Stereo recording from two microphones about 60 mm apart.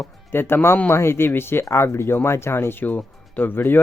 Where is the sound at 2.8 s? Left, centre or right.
Left.